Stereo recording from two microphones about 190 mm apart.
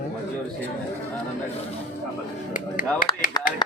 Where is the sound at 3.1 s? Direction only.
20° left (ahead or behind).